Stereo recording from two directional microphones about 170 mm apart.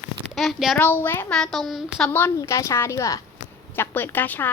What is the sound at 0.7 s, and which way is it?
A child's voice, 10° left (ahead or behind).